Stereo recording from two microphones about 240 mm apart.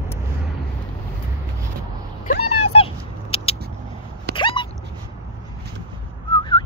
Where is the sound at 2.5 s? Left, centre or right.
Left.